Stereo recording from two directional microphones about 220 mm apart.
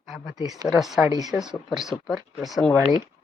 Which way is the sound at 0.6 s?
Centre (ahead or behind).